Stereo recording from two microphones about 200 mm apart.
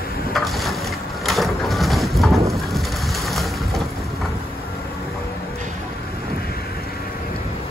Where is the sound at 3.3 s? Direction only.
Centre (ahead or behind).